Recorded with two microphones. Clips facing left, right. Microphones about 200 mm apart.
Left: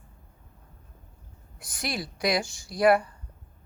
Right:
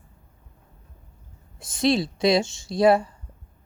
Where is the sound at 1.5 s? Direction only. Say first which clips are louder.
Right 12 dB; 25° right (ahead or behind).